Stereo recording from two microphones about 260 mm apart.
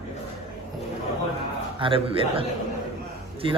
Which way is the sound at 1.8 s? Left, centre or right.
Right.